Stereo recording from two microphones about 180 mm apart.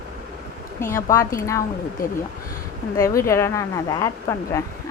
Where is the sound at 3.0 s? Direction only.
15° left (ahead or behind).